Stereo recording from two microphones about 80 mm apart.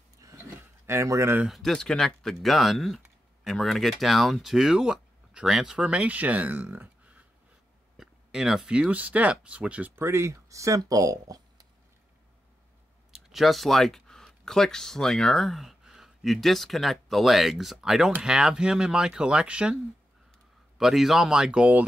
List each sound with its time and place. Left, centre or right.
0.2 s a sound: right
0.8 s speech: right
1.5 s speech: centre; by 7.2 s right
8.0 s speech: centre
9.9 s speech: right
13.1 s speech: centre